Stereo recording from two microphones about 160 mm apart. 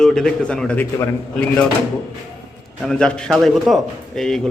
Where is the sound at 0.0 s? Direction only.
5° left (ahead or behind).